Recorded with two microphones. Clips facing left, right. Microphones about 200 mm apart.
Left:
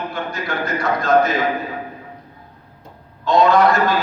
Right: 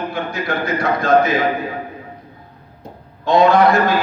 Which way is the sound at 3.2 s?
55° right (ahead or behind).